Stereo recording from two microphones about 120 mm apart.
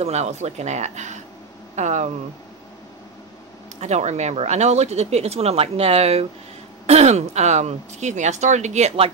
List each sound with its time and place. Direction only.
0.0 s speech: 65° right (ahead or behind)
3.8 s speech: 70° right (ahead or behind)